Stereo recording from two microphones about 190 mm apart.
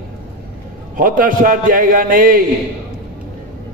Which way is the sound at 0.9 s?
45° right (ahead or behind).